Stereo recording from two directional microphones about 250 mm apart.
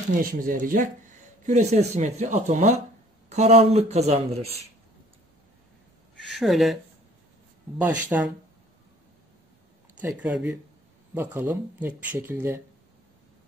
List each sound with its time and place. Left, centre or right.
0.2 s a man's voice: right
6.3 s speech: centre
8.1 s speech: centre
10.0 s speech: centre